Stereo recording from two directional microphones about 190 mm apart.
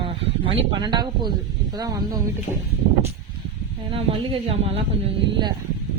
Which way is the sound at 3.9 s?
30° right (ahead or behind).